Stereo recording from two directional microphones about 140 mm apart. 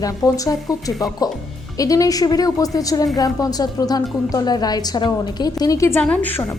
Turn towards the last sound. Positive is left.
turn(degrees=10)  # may be behind; listen again after turning